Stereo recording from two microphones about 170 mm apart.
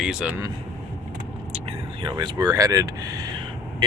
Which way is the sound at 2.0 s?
25° right (ahead or behind).